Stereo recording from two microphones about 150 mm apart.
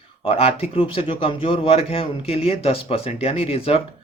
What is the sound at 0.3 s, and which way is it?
Speech, 40° left (ahead or behind).